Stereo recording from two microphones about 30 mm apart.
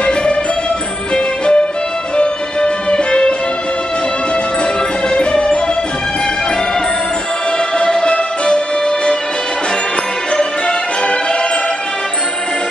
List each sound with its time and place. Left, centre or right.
0.0 s music: left
2.6 s music: left
5.1 s music: left
7.5 s music: left